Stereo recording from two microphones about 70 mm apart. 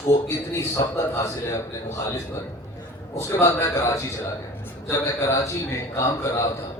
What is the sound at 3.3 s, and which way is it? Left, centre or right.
A man's voice, left.